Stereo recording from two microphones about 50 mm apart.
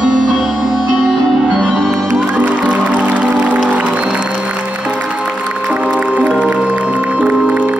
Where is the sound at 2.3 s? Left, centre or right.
Right.